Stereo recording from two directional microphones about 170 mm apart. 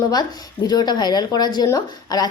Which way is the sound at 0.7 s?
25° left (ahead or behind).